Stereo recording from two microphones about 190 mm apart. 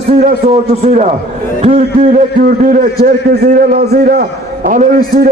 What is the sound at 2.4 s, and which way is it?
A man's voice, 45° right (ahead or behind).